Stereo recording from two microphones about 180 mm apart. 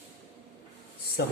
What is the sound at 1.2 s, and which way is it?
Speech, 60° left (ahead or behind).